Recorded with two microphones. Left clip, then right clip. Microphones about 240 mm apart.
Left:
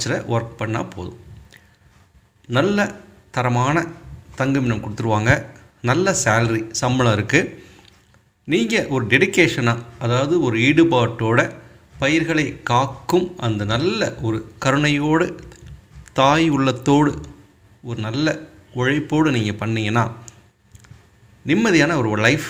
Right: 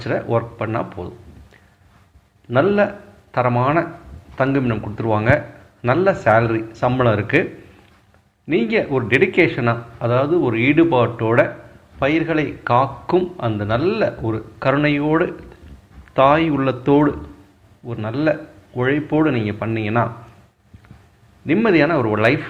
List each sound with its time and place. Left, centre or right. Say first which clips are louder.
0.0 s speech: right 2 dB; left
2.5 s speech: right 3 dB; left
8.4 s speech: right 1 dB; left
21.4 s speech: right 1 dB; left